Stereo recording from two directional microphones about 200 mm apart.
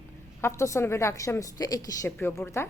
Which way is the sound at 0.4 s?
15° left (ahead or behind).